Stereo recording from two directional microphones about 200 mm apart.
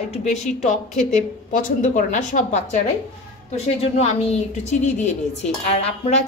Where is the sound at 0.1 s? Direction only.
35° left (ahead or behind).